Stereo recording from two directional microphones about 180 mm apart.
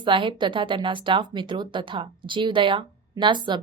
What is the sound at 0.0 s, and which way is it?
A woman's voice, 25° right (ahead or behind).